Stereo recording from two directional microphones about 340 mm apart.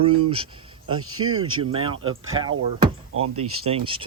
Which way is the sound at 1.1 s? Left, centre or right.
Right.